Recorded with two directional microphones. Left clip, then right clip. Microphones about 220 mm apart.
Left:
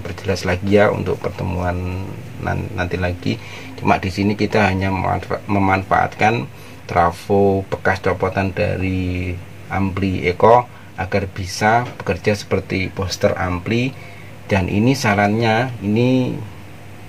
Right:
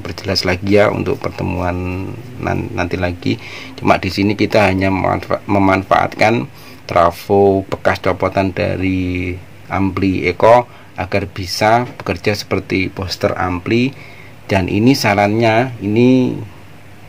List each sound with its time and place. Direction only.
0.1 s speech: 45° right (ahead or behind)